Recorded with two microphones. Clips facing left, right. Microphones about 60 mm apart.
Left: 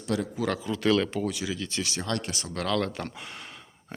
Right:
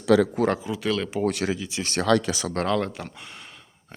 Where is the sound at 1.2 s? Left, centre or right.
Right.